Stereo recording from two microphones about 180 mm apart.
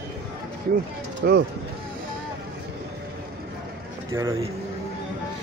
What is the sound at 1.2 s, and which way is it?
Speech, 65° right (ahead or behind).